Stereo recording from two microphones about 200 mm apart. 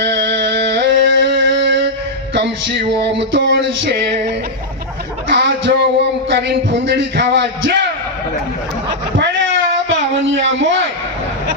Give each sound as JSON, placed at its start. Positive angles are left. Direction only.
{"t": 0.0, "sound": "music", "side_deg": -60}
{"t": 5.3, "sound": "music", "side_deg": -60}
{"t": 8.9, "sound": "a sound", "side_deg": -65}
{"t": 10.2, "sound": "speech", "side_deg": -70}